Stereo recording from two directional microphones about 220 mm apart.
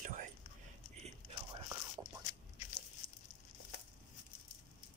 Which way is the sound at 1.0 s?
20° right (ahead or behind).